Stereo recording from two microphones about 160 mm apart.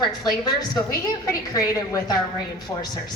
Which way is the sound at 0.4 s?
25° left (ahead or behind).